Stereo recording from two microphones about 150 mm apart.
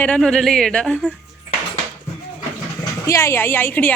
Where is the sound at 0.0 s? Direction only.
5° left (ahead or behind).